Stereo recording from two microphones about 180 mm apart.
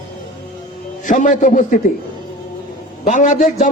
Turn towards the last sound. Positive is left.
turn(degrees=45)  # may be behind; listen again after turning